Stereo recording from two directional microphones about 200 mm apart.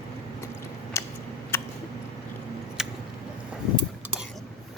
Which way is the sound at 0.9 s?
15° left (ahead or behind).